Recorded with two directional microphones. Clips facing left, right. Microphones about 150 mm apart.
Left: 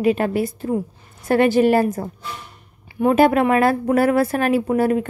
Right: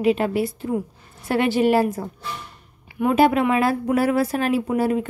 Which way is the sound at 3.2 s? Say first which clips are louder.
Left 2 dB; 50° left (ahead or behind).